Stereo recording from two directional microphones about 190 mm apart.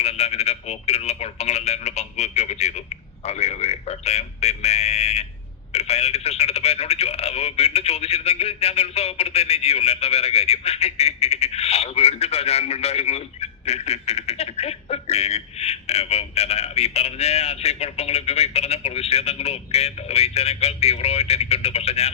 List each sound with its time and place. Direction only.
0.0 s speech: 35° left (ahead or behind)